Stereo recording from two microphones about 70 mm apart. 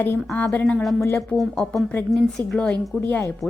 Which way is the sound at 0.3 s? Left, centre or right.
Left.